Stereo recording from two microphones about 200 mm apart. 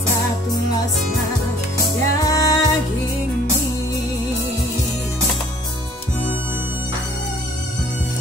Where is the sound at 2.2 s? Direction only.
15° left (ahead or behind).